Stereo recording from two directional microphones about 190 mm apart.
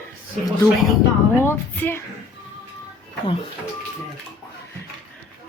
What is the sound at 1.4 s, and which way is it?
Speech, 10° left (ahead or behind).